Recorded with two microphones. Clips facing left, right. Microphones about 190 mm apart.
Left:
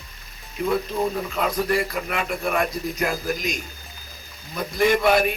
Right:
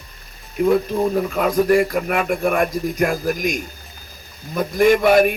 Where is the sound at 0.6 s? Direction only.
50° right (ahead or behind).